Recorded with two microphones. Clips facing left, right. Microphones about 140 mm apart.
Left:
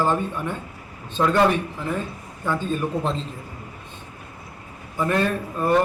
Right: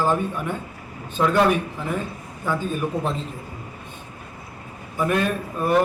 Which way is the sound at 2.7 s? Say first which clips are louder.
Left 1 dB; 10° right (ahead or behind).